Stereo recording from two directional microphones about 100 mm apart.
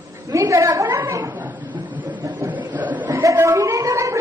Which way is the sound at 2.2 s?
20° right (ahead or behind).